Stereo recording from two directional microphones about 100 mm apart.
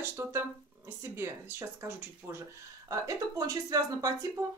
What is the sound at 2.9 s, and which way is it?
Speech, 35° right (ahead or behind).